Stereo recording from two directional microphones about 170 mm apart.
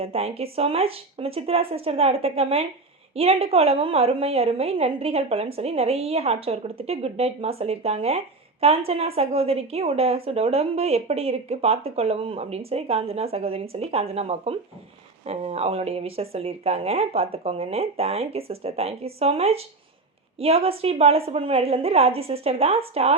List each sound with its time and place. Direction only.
0.0 s a woman's voice: 35° right (ahead or behind)